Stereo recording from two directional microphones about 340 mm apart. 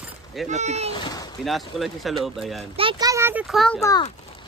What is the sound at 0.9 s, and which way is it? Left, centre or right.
Speech, centre.